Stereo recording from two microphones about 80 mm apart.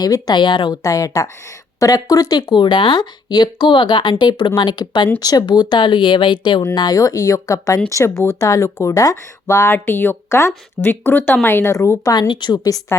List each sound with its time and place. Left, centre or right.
0.0 s speech: left
5.2 s speech: left
6.7 s speech: left
8.4 s speech: left
10.2 s speech: left
12.3 s speech: left